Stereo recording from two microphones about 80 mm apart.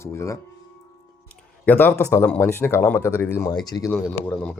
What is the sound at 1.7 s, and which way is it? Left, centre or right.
Speech, left.